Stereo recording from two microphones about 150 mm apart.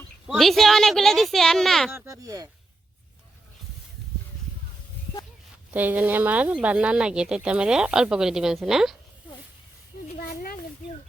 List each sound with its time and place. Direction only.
0.3 s speech: centre (ahead or behind)
1.9 s speech: 20° right (ahead or behind)
5.7 s speech: 10° right (ahead or behind)
10.2 s a sound: 75° left (ahead or behind)